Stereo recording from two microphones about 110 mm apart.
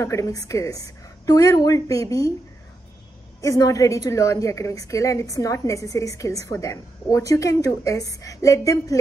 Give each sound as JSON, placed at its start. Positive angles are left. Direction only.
{"t": 0.0, "sound": "a woman's voice", "side_deg": 30}
{"t": 3.3, "sound": "a woman's voice", "side_deg": 30}